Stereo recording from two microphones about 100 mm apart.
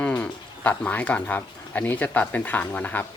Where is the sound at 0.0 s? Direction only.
10° left (ahead or behind).